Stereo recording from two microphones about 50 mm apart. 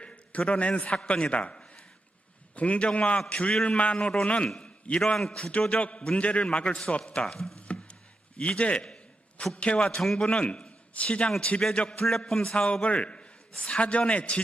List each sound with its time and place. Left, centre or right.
0.0 s a man's voice: left
4.9 s a man's voice: centre
5.4 s a man's voice: left
7.7 s a sound: left
8.4 s a man's voice: left
12.0 s a man's voice: centre
12.4 s a man's voice: left